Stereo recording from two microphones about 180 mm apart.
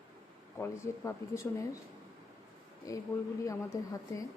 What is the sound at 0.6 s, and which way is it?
Speech, 15° left (ahead or behind).